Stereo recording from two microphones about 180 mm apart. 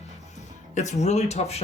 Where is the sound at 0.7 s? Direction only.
40° left (ahead or behind).